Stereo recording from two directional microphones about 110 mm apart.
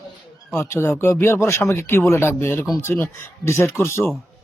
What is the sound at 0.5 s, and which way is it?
Speech, 25° left (ahead or behind).